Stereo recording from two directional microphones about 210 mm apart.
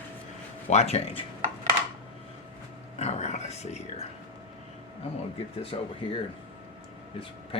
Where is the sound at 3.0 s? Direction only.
30° left (ahead or behind).